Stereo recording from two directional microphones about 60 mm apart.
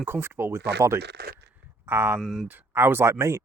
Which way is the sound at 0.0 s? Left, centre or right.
Right.